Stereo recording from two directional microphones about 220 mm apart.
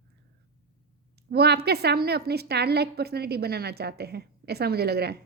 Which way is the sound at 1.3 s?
45° right (ahead or behind).